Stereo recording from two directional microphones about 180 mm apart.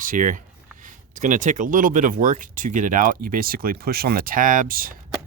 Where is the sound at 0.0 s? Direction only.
50° right (ahead or behind).